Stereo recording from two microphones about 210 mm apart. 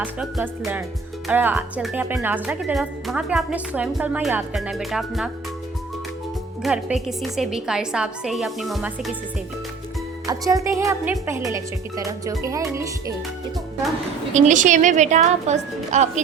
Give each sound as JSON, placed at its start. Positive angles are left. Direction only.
{"t": 0.0, "sound": "speech", "side_deg": -5}
{"t": 6.6, "sound": "speech", "side_deg": 0}
{"t": 10.2, "sound": "speech", "side_deg": -15}
{"t": 14.3, "sound": "a woman's voice", "side_deg": -35}